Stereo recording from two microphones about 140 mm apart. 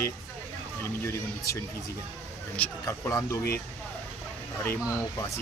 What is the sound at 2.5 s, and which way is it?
Speech, 10° left (ahead or behind).